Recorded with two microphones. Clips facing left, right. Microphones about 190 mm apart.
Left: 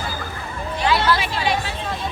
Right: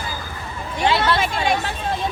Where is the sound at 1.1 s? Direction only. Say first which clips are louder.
Right 2 dB; 45° right (ahead or behind).